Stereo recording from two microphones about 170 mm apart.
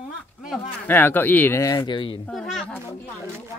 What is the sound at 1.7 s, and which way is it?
Speech, 30° left (ahead or behind).